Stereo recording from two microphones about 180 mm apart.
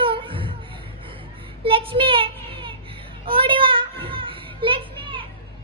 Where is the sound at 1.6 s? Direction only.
30° right (ahead or behind).